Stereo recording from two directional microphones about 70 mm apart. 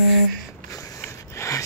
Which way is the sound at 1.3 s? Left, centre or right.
Left.